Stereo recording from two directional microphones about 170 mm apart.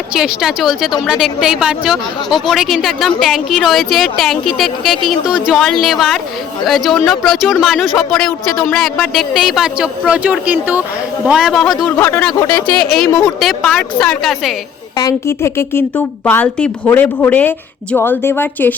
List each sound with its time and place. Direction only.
0.2 s a woman's voice: 5° right (ahead or behind)
11.9 s a woman's voice: 15° left (ahead or behind)
14.9 s speech: 20° left (ahead or behind)